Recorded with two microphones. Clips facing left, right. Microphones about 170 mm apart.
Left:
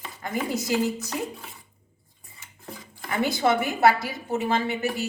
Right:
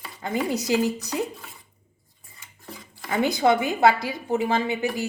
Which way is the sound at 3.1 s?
20° right (ahead or behind).